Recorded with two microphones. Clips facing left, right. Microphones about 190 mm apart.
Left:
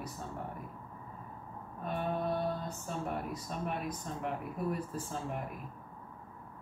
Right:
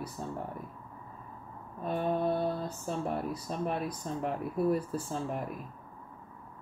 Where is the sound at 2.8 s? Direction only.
35° right (ahead or behind).